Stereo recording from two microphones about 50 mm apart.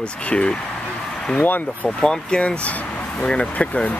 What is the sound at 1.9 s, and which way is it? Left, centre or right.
Speech, centre.